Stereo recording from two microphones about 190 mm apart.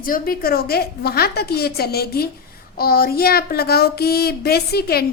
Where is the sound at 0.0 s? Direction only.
50° left (ahead or behind).